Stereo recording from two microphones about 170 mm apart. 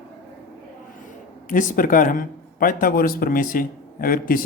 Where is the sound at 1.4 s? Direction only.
50° left (ahead or behind).